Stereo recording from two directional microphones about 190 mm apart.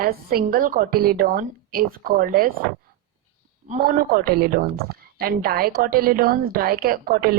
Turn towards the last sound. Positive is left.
turn(degrees=-50)  # may be behind; listen again after turning